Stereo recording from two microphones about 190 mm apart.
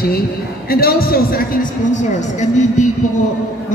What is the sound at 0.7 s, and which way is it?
A man's voice, 50° left (ahead or behind).